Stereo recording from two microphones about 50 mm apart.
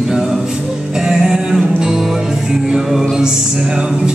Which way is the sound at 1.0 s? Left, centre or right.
Centre.